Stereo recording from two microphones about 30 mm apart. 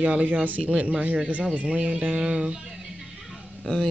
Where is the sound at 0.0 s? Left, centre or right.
Right.